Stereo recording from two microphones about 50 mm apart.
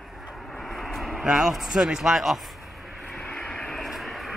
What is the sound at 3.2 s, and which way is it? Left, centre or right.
Vehicle, left.